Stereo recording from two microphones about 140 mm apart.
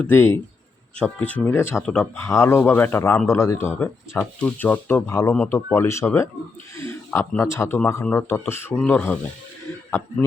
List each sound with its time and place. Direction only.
0.0 s speech: 15° left (ahead or behind)